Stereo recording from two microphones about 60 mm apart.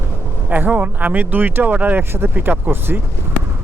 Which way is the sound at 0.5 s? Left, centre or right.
Right.